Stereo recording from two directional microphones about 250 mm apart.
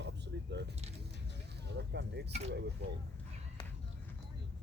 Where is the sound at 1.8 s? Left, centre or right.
Right.